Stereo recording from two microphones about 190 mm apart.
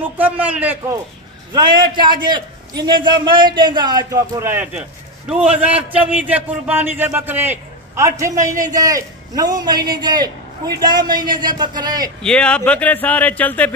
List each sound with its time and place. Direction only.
0.0 s a man's voice: 10° right (ahead or behind)
1.5 s a man's voice: 25° right (ahead or behind)
12.2 s a man's voice: 5° left (ahead or behind)